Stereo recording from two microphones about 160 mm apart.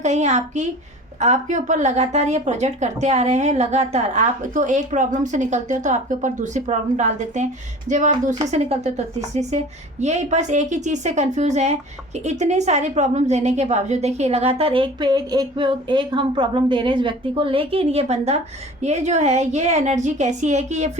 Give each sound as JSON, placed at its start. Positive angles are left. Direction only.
{"t": 0.0, "sound": "a woman's voice", "side_deg": -45}